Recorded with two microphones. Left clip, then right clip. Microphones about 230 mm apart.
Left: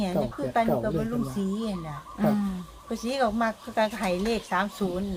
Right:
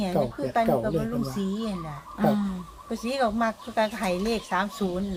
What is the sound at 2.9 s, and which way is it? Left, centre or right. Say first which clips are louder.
Speech: even; centre.